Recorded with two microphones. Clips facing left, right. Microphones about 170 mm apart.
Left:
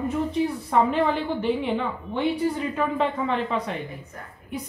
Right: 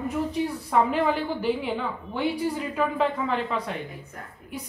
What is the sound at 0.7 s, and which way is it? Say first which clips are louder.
A woman's voice: even; 5° right (ahead or behind).